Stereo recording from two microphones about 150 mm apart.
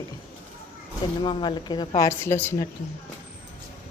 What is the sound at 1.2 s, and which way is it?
Speech, 35° left (ahead or behind).